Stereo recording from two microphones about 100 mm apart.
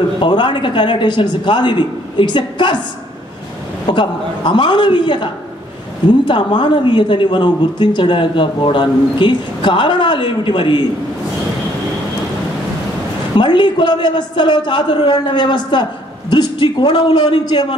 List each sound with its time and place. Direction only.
0.2 s speech: 50° left (ahead or behind)
3.8 s speech: 50° left (ahead or behind)
13.4 s speech: 50° left (ahead or behind)